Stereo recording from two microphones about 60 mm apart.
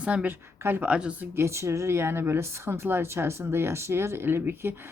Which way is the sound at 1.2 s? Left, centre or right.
Right.